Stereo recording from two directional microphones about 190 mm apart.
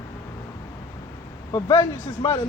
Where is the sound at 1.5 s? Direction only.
15° left (ahead or behind).